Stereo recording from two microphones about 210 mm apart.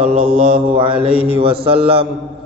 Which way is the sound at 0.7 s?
25° right (ahead or behind).